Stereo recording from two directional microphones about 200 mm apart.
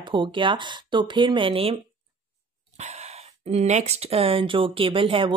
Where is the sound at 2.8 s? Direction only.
35° right (ahead or behind).